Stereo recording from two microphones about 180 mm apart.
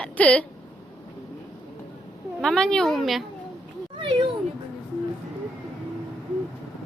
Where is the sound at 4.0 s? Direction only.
30° right (ahead or behind).